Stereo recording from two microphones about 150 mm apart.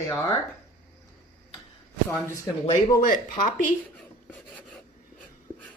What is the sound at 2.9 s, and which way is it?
Speech, 70° left (ahead or behind).